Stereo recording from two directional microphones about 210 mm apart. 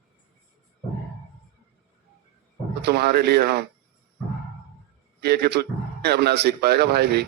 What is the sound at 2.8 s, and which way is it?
Speech, 50° right (ahead or behind).